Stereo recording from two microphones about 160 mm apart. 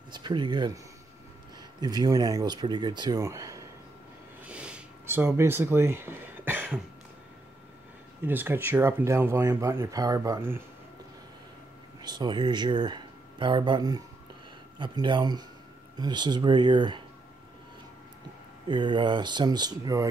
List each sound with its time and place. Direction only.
0.1 s speech: 30° right (ahead or behind)
1.8 s speech: 25° right (ahead or behind)
4.5 s a sound: 5° right (ahead or behind)
8.3 s speech: 10° right (ahead or behind)
12.0 s speech: 25° right (ahead or behind)
18.7 s speech: 30° right (ahead or behind)